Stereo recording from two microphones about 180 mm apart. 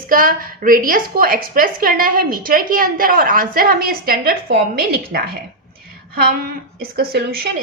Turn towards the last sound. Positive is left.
turn(degrees=-55)  # may be behind; listen again after turning